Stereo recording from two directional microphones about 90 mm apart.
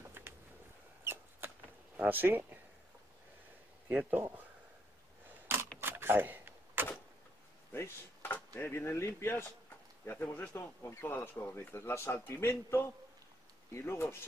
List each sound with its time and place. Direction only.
1.0 s a sound: 25° right (ahead or behind)
2.0 s speech: 20° right (ahead or behind)
3.9 s speech: 20° right (ahead or behind)
5.8 s a sound: 25° right (ahead or behind)
7.7 s dishes: 25° left (ahead or behind)
8.5 s speech: 25° left (ahead or behind)